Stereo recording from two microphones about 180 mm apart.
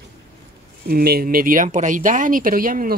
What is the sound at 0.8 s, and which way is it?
Speech, 60° right (ahead or behind).